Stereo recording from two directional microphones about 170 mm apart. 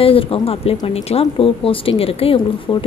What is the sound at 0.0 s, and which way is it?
A woman's voice, 35° left (ahead or behind).